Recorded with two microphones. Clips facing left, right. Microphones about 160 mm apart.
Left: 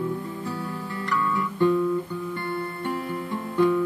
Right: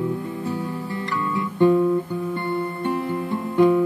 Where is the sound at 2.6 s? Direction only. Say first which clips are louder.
Right 5 dB; 20° right (ahead or behind).